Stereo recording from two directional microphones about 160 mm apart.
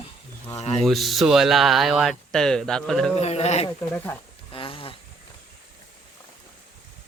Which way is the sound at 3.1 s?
40° left (ahead or behind).